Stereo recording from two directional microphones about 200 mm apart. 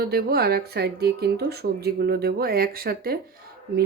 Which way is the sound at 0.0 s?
50° right (ahead or behind).